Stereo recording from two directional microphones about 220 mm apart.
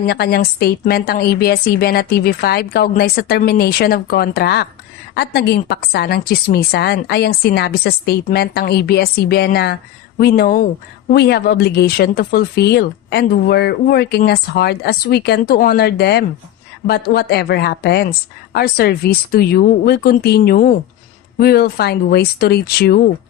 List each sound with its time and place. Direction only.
0.1 s speech: 45° left (ahead or behind)